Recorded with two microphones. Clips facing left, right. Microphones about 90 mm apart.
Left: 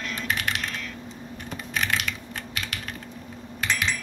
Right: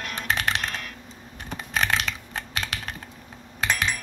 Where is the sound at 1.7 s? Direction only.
35° right (ahead or behind).